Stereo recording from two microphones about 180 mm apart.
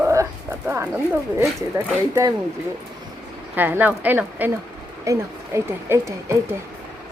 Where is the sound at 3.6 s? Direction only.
10° right (ahead or behind).